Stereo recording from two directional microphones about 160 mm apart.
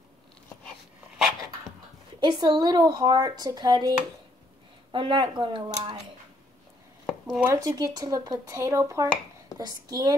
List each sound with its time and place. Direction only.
2.1 s speech: 30° right (ahead or behind)
4.9 s speech: 30° right (ahead or behind)
7.3 s speech: 15° right (ahead or behind)